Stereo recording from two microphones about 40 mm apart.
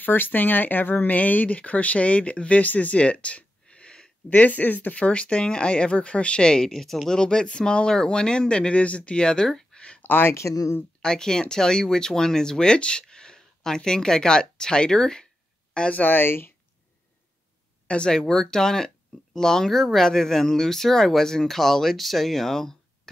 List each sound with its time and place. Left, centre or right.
0.0 s speech: left
4.3 s speech: left; by 6.7 s centre
6.7 s speech: centre
7.2 s speech: centre
9.8 s a sound: left
10.0 s speech: left
11.0 s speech: centre
16.1 s speech: left
17.8 s speech: left
18.2 s speech: centre